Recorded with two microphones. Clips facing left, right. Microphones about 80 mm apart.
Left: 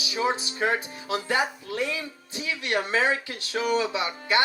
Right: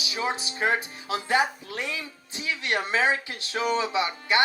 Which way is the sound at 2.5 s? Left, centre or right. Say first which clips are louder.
Right 1 dB; right.